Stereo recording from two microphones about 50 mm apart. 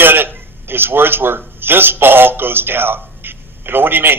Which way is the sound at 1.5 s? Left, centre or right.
Right.